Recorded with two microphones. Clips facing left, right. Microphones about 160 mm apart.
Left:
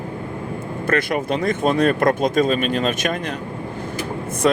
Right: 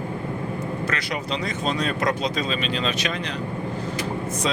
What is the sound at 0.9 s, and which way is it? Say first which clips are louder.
Speech: left 7 dB; 50° left (ahead or behind).